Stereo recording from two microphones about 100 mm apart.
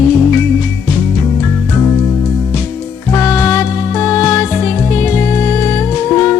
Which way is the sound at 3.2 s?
25° left (ahead or behind).